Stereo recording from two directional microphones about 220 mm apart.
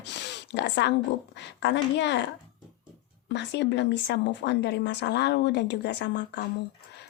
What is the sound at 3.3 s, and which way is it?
Speech, 50° left (ahead or behind).